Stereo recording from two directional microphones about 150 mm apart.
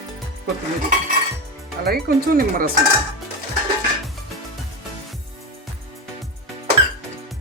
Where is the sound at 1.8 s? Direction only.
90° right; by 2.7 s 70° right (ahead or behind).